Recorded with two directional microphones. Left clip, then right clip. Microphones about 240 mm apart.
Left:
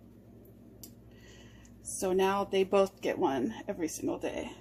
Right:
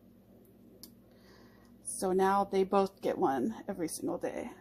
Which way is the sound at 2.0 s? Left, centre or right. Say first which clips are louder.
Even; right.